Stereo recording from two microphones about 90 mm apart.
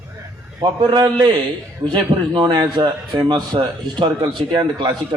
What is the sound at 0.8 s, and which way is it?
A man's voice, 55° right (ahead or behind).